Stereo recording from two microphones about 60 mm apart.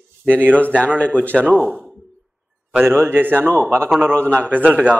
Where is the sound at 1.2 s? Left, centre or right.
Left.